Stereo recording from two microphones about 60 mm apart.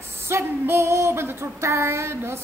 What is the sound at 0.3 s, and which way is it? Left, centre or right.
Female singing, right.